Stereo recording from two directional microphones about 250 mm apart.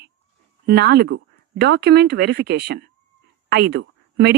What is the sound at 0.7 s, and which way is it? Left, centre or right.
A woman's voice, right.